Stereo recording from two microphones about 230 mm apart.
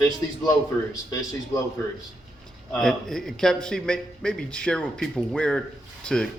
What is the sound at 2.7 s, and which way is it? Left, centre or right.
Speech, centre.